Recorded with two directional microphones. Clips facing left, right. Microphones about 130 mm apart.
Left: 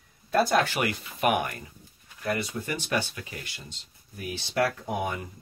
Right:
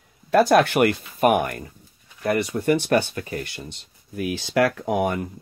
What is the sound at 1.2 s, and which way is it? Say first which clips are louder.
Speech: right 6 dB; 45° right (ahead or behind).